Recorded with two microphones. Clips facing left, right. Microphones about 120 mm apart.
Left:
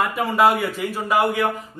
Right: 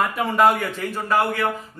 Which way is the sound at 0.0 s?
Centre (ahead or behind).